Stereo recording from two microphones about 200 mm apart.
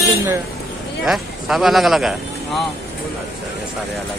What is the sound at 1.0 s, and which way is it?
Speech, centre (ahead or behind).